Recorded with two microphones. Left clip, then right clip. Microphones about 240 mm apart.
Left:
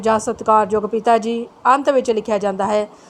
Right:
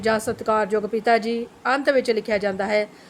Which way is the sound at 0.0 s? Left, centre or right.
Centre.